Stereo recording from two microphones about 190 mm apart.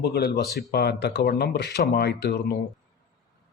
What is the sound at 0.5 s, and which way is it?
Speech, 60° left (ahead or behind).